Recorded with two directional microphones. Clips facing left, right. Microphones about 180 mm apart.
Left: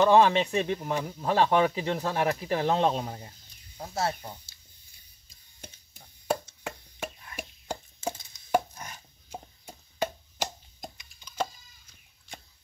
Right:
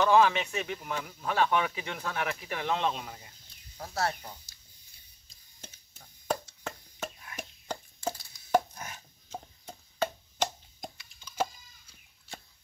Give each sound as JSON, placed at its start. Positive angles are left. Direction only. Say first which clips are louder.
{"t": 0.0, "sound": "speech", "louder": "left 3 dB", "side_deg": 30}
{"t": 3.7, "sound": "speech", "louder": "left 2 dB", "side_deg": 20}
{"t": 5.6, "sound": "a sound", "louder": "left 3 dB", "side_deg": 10}
{"t": 7.3, "sound": "chop", "louder": "left 2 dB", "side_deg": 10}
{"t": 8.1, "sound": "chopping", "louder": "even", "side_deg": 20}
{"t": 8.7, "sound": "chopping", "louder": "even", "side_deg": -5}
{"t": 9.3, "sound": "chopping", "louder": "even", "side_deg": 10}